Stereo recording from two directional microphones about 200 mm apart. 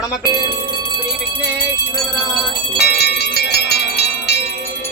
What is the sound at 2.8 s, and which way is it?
Wind chime, 55° left (ahead or behind).